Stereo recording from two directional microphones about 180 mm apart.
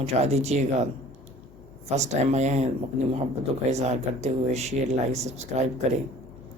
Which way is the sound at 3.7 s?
35° right (ahead or behind).